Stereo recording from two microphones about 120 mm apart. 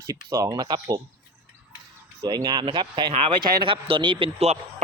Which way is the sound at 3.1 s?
60° right (ahead or behind).